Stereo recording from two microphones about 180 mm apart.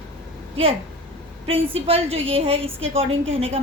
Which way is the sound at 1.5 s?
35° right (ahead or behind).